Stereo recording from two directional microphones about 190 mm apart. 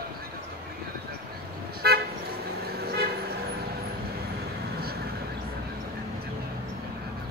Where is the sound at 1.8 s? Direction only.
55° right (ahead or behind).